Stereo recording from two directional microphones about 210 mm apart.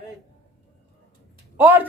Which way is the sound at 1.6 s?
10° right (ahead or behind).